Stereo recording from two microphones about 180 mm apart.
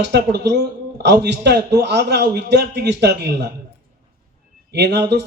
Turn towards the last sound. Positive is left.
turn(degrees=-70)  # may be behind; listen again after turning